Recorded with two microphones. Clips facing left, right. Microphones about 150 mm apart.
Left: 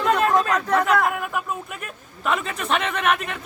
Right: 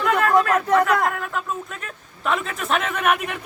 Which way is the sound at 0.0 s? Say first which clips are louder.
Right 1 dB; 20° left (ahead or behind).